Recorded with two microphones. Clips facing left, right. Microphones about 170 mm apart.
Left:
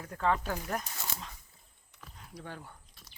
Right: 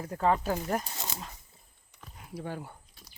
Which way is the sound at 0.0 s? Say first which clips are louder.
Right 4 dB; 30° right (ahead or behind).